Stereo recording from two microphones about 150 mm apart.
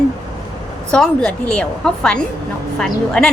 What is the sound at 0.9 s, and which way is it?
A woman's voice, 5° left (ahead or behind).